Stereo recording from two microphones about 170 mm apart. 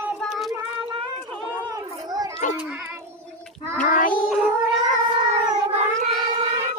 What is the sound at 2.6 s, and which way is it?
Speech, 5° right (ahead or behind).